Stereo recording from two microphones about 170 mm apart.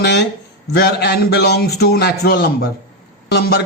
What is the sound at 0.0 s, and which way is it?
Speech, 90° left.